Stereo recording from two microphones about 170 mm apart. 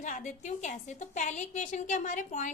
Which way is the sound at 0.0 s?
45° left (ahead or behind).